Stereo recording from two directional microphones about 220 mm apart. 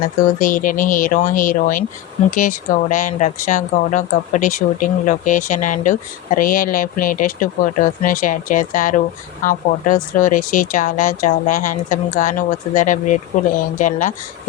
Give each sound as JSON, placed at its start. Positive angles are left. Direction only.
{"t": 0.3, "sound": "speech", "side_deg": 35}